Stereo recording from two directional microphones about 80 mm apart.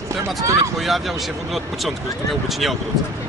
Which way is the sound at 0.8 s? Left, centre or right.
Centre.